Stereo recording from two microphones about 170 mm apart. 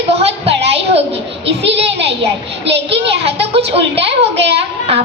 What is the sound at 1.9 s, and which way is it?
A child's voice, 90° right.